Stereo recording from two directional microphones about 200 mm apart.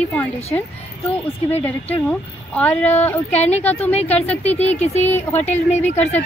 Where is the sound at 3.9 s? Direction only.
30° left (ahead or behind).